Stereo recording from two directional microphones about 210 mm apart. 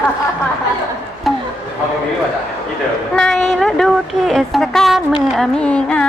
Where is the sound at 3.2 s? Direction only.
Centre (ahead or behind).